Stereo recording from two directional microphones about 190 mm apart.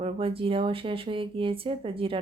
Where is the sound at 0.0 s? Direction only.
30° right (ahead or behind).